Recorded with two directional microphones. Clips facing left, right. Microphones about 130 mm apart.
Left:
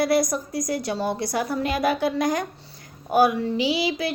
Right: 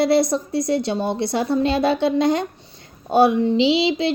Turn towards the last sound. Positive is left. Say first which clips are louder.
# right 6 dB
turn(degrees=-25)  # may be behind; listen again after turning